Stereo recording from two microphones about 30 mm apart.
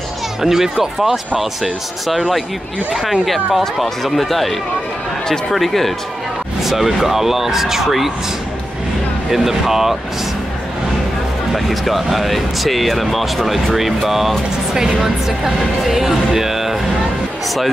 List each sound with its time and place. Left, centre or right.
0.4 s speech: centre
6.6 s speech: centre
9.3 s speech: centre
11.5 s speech: centre
14.7 s speech: centre